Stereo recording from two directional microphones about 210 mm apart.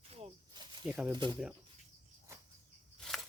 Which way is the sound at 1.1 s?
20° right (ahead or behind).